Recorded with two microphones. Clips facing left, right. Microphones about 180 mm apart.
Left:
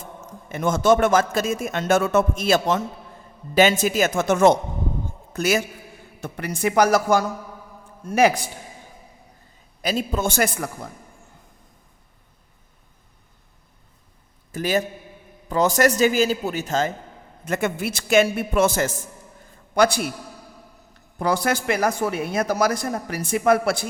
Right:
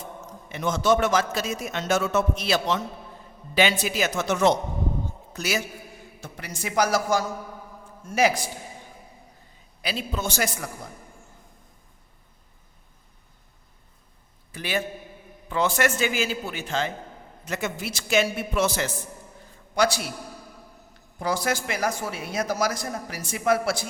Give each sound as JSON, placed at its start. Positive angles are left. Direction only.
{"t": 0.3, "sound": "a man's voice", "side_deg": 50}
{"t": 9.8, "sound": "a man's voice", "side_deg": 45}
{"t": 14.5, "sound": "a man's voice", "side_deg": 40}
{"t": 17.4, "sound": "a man's voice", "side_deg": 55}
{"t": 21.2, "sound": "speech", "side_deg": 60}